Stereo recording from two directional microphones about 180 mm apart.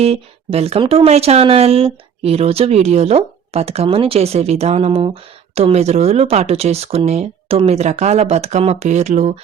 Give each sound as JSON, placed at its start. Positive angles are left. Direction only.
{"t": 0.0, "sound": "speech", "side_deg": -35}